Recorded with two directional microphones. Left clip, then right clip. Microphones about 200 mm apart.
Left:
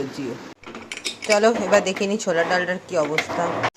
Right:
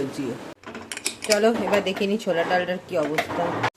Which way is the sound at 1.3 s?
Centre (ahead or behind).